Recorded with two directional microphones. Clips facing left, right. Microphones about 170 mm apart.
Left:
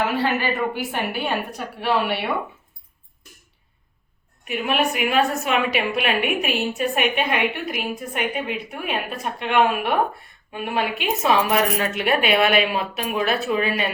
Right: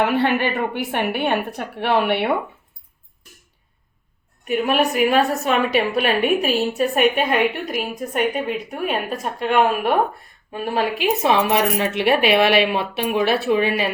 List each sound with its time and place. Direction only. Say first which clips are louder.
0.2 s a woman's voice: right 3 dB; 60° right (ahead or behind)
4.4 s a woman's voice: right 4 dB; 40° right (ahead or behind)